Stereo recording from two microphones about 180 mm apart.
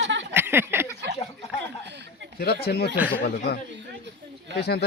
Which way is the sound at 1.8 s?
75° right (ahead or behind).